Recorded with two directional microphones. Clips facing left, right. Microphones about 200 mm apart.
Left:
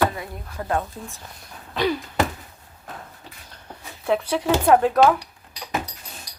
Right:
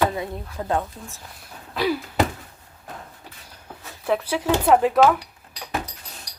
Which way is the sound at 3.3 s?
10° right (ahead or behind).